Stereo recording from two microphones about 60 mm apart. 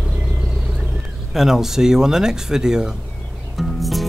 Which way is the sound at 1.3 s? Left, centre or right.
Centre.